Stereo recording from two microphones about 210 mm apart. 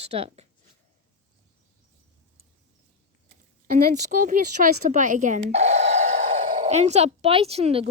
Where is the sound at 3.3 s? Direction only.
45° right (ahead or behind).